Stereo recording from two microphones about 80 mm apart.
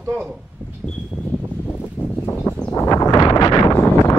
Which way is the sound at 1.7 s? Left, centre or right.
Left.